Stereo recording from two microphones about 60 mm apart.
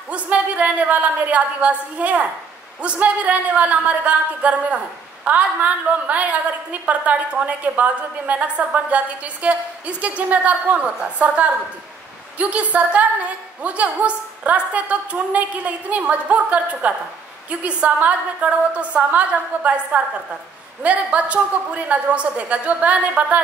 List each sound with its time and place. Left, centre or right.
0.1 s a woman's voice: right